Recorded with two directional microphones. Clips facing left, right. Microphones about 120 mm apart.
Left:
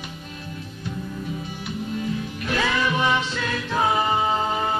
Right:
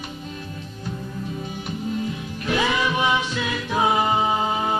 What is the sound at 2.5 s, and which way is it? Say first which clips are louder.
Music: right 1 dB; 15° right (ahead or behind).